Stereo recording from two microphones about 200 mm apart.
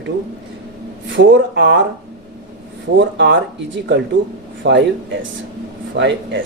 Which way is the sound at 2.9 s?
60° right (ahead or behind).